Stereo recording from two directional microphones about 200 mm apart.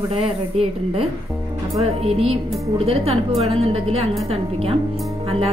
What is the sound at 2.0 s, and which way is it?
A woman's voice, 30° right (ahead or behind).